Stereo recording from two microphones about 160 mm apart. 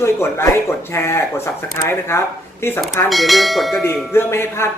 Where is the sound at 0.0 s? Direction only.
15° left (ahead or behind).